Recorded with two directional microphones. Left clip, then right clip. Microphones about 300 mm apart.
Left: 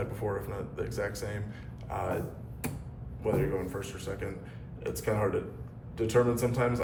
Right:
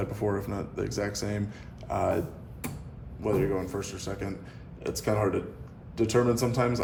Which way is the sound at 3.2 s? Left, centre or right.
Centre.